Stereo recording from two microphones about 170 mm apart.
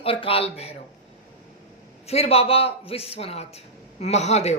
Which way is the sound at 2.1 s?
35° left (ahead or behind).